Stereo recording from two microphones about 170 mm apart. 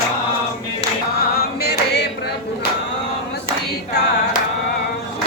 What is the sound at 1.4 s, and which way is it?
Chant, 70° left (ahead or behind).